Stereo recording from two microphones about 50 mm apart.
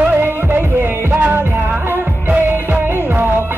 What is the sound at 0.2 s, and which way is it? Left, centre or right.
Music, right.